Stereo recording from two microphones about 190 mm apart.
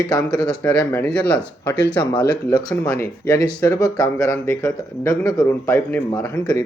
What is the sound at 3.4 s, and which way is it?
Speech, 20° left (ahead or behind).